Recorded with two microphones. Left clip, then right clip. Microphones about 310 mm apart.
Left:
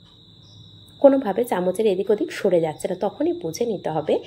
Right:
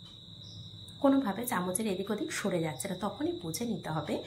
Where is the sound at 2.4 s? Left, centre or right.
Left.